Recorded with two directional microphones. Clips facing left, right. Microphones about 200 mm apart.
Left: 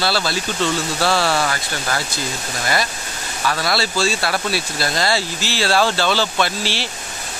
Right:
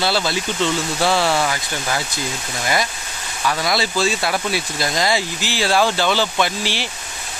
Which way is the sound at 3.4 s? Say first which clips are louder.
Even; 15° right (ahead or behind).